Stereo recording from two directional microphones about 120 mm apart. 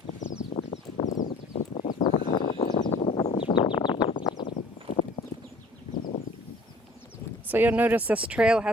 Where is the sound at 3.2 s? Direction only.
55° left (ahead or behind).